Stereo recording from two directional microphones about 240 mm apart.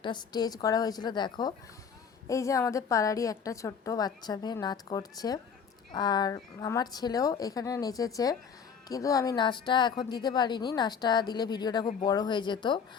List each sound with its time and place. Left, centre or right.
0.0 s a woman's voice: centre